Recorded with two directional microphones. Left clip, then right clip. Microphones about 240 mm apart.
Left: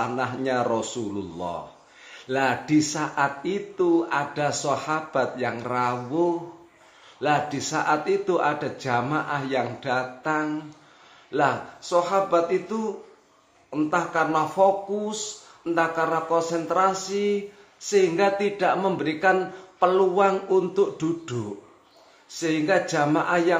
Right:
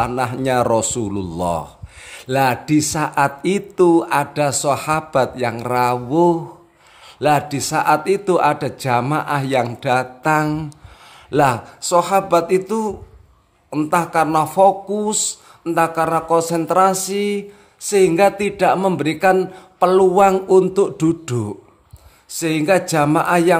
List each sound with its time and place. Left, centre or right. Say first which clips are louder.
0.0 s speech: right 7 dB; right